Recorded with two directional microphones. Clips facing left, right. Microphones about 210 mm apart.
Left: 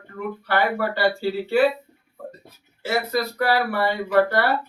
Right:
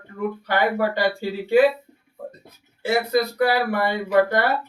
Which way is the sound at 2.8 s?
15° right (ahead or behind).